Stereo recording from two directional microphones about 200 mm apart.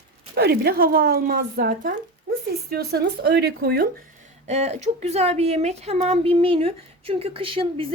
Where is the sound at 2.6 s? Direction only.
55° right (ahead or behind).